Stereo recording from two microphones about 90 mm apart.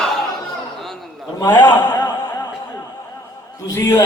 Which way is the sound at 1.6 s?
50° left (ahead or behind).